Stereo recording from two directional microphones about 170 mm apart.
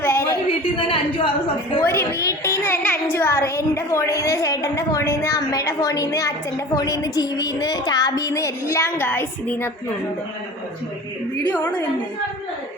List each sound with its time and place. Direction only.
0.0 s a sound: 15° left (ahead or behind)
0.8 s a woman's voice: 30° left (ahead or behind)
1.8 s a child's voice: 15° left (ahead or behind)